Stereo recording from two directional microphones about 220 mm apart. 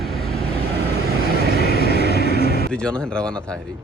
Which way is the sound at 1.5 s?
45° left (ahead or behind).